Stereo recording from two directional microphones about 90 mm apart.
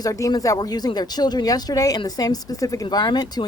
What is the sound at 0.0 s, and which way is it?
Speech, 40° left (ahead or behind).